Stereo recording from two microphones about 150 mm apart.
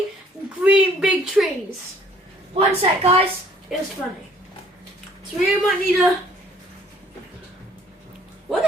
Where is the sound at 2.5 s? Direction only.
40° right (ahead or behind).